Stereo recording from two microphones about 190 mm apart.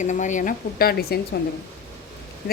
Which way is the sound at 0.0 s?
40° left (ahead or behind).